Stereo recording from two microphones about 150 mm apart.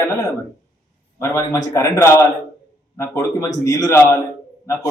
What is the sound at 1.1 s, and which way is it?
A man's voice, 20° left (ahead or behind).